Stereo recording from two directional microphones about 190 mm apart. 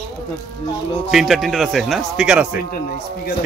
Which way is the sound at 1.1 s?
Centre (ahead or behind).